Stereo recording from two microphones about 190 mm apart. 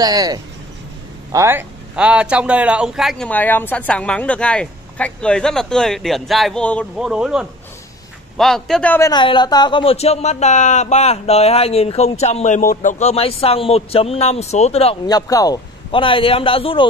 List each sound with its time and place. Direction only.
0.0 s a man's voice: 20° right (ahead or behind); by 7.1 s 5° left (ahead or behind)
7.1 s a man's voice: 5° right (ahead or behind)
9.1 s speech: 25° left (ahead or behind)
15.0 s a man's voice: 20° left (ahead or behind)